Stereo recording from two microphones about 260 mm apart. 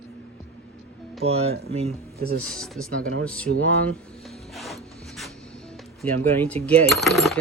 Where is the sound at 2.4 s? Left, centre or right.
Centre.